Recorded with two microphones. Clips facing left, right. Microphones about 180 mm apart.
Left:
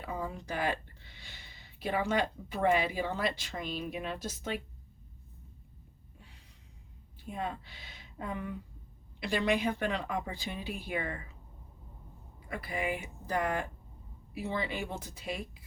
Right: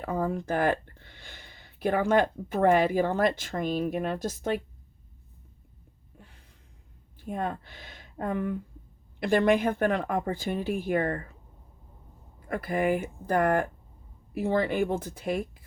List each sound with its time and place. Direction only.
0.0 s speech: 50° right (ahead or behind)
6.1 s gasp: 50° right (ahead or behind)
7.3 s speech: 50° right (ahead or behind)
12.5 s speech: 50° right (ahead or behind)